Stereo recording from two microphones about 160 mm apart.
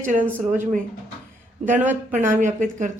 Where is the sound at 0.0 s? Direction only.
55° right (ahead or behind).